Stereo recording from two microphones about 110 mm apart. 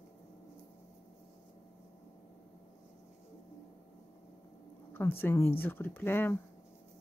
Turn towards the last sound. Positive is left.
turn(degrees=20)  # may be behind; listen again after turning